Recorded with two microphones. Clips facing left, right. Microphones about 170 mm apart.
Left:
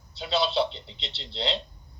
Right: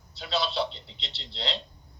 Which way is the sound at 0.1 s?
Centre (ahead or behind).